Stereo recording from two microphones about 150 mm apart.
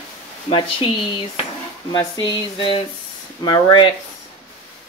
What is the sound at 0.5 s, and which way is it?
Speech, 35° left (ahead or behind).